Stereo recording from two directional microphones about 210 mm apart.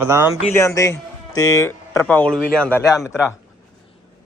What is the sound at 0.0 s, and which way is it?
Speech, 10° right (ahead or behind).